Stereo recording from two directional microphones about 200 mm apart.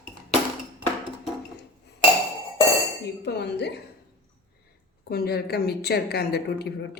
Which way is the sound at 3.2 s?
55° left (ahead or behind).